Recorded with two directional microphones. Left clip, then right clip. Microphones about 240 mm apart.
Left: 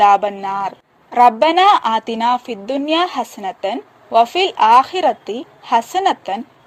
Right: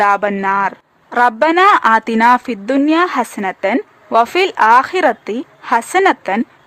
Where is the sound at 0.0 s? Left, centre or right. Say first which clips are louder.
Left 1 dB; centre.